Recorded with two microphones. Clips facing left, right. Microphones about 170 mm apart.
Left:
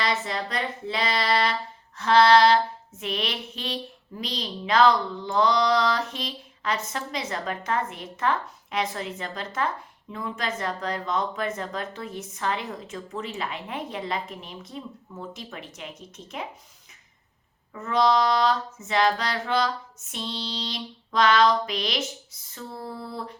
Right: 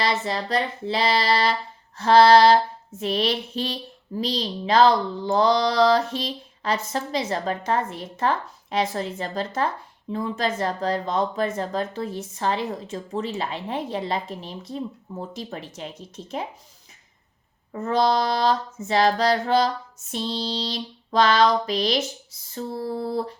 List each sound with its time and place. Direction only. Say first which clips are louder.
0.0 s speech: right 3 dB; 30° right (ahead or behind)
17.7 s speech: right 1 dB; 35° right (ahead or behind)